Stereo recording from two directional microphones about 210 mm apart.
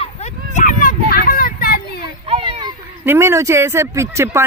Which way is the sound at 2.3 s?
25° right (ahead or behind).